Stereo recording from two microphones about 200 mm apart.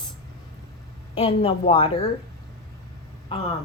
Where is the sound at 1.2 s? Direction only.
30° left (ahead or behind).